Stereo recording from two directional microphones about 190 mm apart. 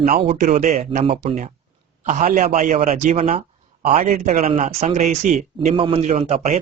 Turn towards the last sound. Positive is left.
turn(degrees=-35)  # may be behind; listen again after turning